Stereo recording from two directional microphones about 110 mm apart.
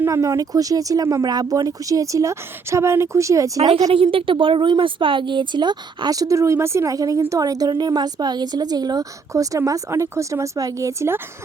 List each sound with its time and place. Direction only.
0.0 s speech: 30° right (ahead or behind)
3.9 s speech: 55° right (ahead or behind); by 11.2 s 25° right (ahead or behind)